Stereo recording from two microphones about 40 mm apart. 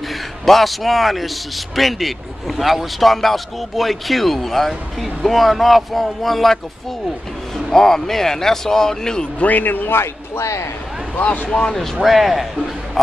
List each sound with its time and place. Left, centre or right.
0.5 s a man's voice: centre
9.4 s a man's voice: left
11.1 s a man's voice: left
11.5 s speech: centre
11.8 s a man's voice: centre